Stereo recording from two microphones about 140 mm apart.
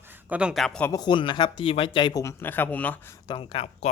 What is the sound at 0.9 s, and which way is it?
Speech, 30° left (ahead or behind).